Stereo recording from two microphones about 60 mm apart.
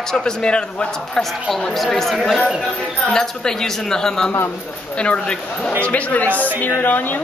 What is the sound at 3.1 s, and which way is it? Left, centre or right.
Speech, centre.